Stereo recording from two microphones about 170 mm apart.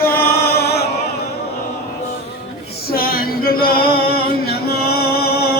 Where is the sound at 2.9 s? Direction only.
60° left (ahead or behind).